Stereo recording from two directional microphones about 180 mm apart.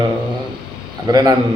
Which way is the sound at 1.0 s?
20° right (ahead or behind).